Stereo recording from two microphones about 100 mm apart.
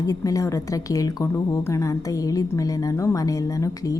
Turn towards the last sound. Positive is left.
turn(degrees=35)  # may be behind; listen again after turning